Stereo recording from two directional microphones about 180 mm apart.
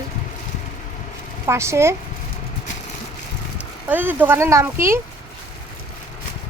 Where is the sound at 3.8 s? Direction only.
10° right (ahead or behind).